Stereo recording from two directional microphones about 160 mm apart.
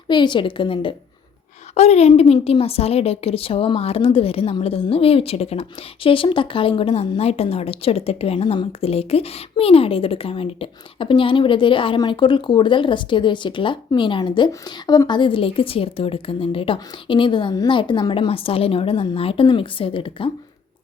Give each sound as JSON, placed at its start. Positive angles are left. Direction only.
{"t": 0.1, "sound": "a woman's voice", "side_deg": 30}
{"t": 1.7, "sound": "a woman's voice", "side_deg": 40}